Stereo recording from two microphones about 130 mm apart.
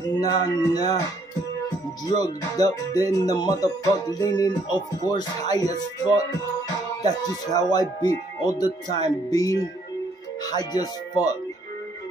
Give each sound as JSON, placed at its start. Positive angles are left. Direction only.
{"t": 0.2, "sound": "music", "side_deg": 30}
{"t": 2.1, "sound": "music", "side_deg": 30}
{"t": 7.0, "sound": "speech", "side_deg": 30}